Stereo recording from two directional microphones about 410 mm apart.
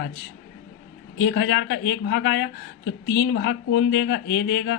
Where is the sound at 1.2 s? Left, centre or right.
Left.